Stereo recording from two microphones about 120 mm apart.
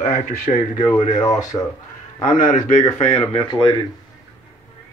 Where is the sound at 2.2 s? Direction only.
90° left.